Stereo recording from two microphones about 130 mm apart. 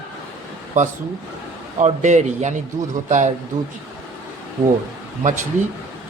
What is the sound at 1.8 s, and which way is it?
A man's voice, 65° right (ahead or behind).